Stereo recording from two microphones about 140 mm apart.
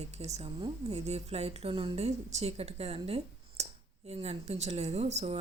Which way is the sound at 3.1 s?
45° right (ahead or behind).